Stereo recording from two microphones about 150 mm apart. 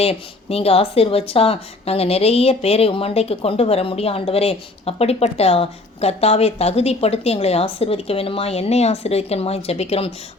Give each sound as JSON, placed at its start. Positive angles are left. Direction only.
{"t": 0.0, "sound": "a woman's voice", "side_deg": 40}